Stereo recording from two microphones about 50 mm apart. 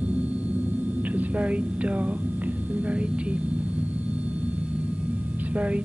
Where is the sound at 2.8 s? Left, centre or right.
Right.